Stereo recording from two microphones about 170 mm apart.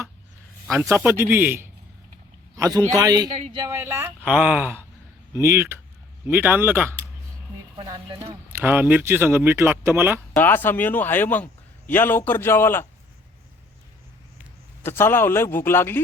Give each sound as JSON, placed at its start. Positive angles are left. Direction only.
{"t": 0.7, "sound": "a man's voice", "side_deg": -15}
{"t": 7.8, "sound": "a man's voice", "side_deg": -30}
{"t": 8.5, "sound": "speech", "side_deg": -10}
{"t": 10.3, "sound": "a man's voice", "side_deg": 10}
{"t": 14.8, "sound": "a man's voice", "side_deg": 15}